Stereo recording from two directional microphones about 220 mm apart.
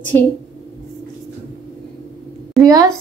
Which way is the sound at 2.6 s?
15° right (ahead or behind).